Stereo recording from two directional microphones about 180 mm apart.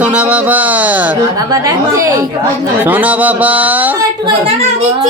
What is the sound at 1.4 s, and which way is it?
Speech, 20° right (ahead or behind).